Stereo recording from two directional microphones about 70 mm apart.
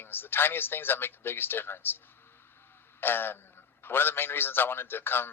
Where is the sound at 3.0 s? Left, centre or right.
Left.